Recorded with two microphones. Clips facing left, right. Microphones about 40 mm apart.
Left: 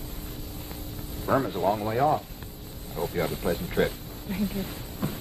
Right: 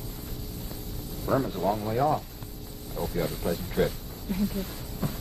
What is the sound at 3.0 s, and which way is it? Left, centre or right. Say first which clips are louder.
Speech: left 2 dB; left.